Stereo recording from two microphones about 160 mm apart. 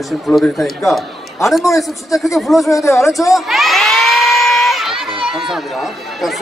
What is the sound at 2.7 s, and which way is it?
Speech, 20° left (ahead or behind).